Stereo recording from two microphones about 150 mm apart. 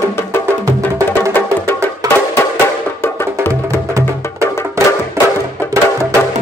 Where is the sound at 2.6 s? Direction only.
15° left (ahead or behind).